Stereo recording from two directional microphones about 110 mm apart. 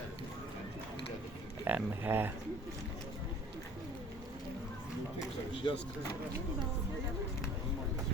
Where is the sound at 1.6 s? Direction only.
20° right (ahead or behind).